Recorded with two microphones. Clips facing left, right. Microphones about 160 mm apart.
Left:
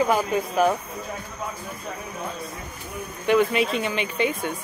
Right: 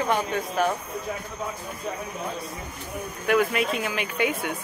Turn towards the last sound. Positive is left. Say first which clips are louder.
# left 1 dB
turn(degrees=-10)  # may be behind; listen again after turning